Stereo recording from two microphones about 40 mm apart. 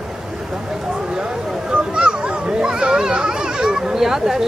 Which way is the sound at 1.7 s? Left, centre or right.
Right.